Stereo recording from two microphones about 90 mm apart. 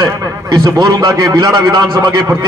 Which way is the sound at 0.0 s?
45° right (ahead or behind).